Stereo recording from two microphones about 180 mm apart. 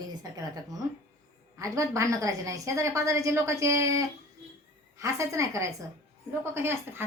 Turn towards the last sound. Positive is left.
turn(degrees=-15)  # may be behind; listen again after turning